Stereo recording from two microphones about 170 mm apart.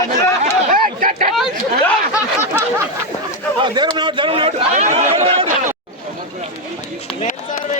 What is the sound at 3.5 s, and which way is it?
A man's voice, 25° right (ahead or behind).